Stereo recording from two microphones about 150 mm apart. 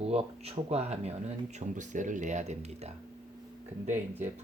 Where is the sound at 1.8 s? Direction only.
60° right (ahead or behind).